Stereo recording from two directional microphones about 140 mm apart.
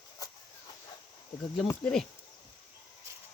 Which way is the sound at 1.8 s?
5° left (ahead or behind).